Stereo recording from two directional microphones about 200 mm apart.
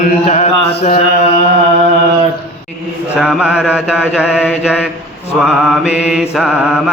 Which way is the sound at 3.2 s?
5° right (ahead or behind).